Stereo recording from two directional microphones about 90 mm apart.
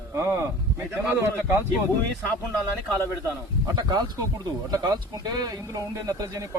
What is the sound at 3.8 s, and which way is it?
Speech, 45° right (ahead or behind).